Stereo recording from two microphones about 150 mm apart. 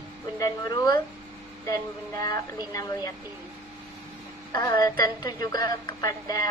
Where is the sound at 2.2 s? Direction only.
25° left (ahead or behind).